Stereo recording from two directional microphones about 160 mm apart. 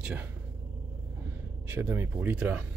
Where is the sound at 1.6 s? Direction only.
10° right (ahead or behind).